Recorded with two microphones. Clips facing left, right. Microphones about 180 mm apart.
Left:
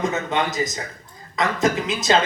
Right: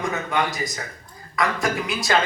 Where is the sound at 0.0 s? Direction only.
20° left (ahead or behind).